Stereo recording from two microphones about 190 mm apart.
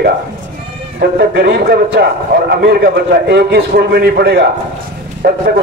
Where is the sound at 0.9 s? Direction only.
60° right (ahead or behind).